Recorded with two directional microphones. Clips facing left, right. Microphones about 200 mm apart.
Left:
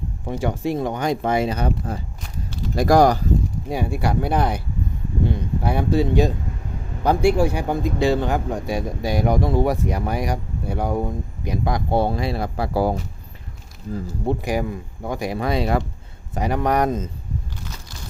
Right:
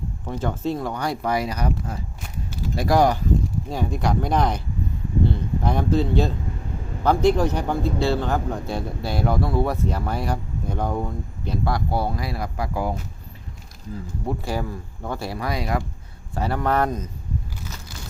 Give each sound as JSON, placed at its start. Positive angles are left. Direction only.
{"t": 0.3, "sound": "speech", "side_deg": 15}
{"t": 2.7, "sound": "speech", "side_deg": 45}
{"t": 3.7, "sound": "a man's voice", "side_deg": 10}
{"t": 14.4, "sound": "a man's voice", "side_deg": 15}